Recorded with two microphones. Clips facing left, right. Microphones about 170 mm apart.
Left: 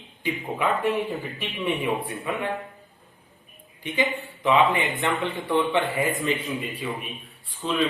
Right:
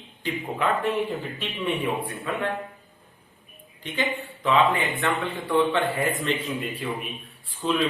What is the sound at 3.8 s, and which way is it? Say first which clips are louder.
Speech: left 2 dB; 15° left (ahead or behind).